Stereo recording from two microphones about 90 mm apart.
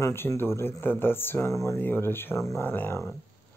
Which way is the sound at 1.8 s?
25° left (ahead or behind).